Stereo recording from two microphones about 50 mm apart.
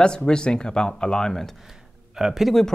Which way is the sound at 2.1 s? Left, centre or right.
Centre.